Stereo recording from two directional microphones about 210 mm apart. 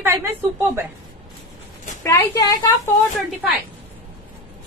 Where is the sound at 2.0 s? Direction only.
15° left (ahead or behind).